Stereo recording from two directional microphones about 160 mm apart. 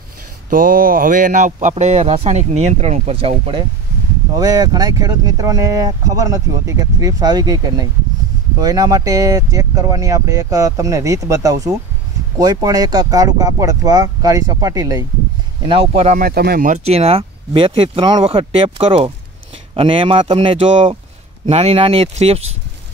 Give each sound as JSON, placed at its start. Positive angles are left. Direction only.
{"t": 0.5, "sound": "speech", "side_deg": -60}
{"t": 4.4, "sound": "speech", "side_deg": -25}
{"t": 15.6, "sound": "speech", "side_deg": -35}
{"t": 16.2, "sound": "speech", "side_deg": -70}
{"t": 16.7, "sound": "speech", "side_deg": -40}